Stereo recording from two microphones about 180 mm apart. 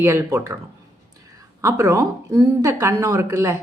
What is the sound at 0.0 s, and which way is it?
A woman's voice, 15° right (ahead or behind).